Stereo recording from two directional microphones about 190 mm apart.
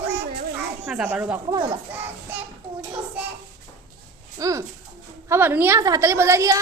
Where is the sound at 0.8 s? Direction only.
10° right (ahead or behind).